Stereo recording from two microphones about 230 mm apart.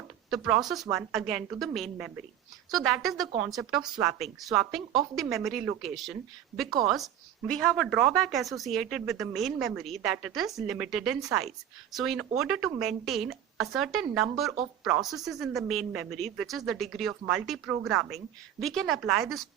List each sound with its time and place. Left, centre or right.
0.3 s speech: centre
7.4 s speech: centre